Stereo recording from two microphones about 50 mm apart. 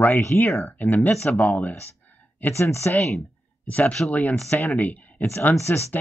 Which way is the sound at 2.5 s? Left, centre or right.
Left.